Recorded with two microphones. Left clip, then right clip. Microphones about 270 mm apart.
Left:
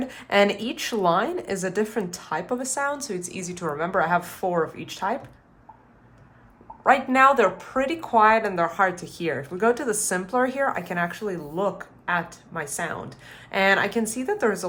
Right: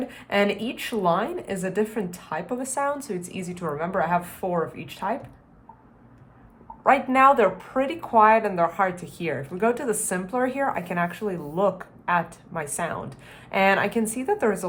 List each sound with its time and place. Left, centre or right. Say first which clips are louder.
0.1 s speech: left 4 dB; centre
6.8 s speech: even; centre